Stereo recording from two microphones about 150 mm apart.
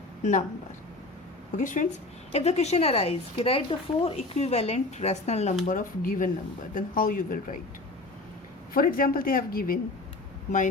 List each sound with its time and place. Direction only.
0.2 s speech: 55° left (ahead or behind)
1.5 s speech: 60° left (ahead or behind)
2.3 s a woman's voice: 45° left (ahead or behind)
5.6 s speech: 65° left (ahead or behind)
8.7 s speech: 75° left (ahead or behind)